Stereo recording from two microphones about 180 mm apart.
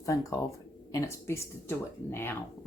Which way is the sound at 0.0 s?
20° left (ahead or behind).